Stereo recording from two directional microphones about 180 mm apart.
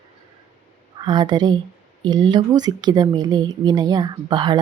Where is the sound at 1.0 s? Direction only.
25° right (ahead or behind).